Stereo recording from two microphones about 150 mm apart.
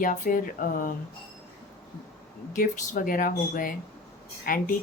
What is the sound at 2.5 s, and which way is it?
Speech, 65° left (ahead or behind).